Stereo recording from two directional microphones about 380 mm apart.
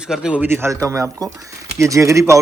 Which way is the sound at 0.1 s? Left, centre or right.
Centre.